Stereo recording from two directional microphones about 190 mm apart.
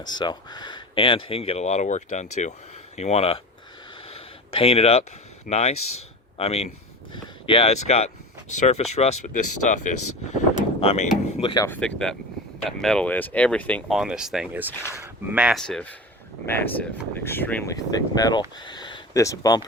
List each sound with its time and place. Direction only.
0.0 s speech: 25° left (ahead or behind)
4.0 s a sound: 30° left (ahead or behind)
5.5 s speech: 35° left (ahead or behind)
11.6 s speech: 10° left (ahead or behind)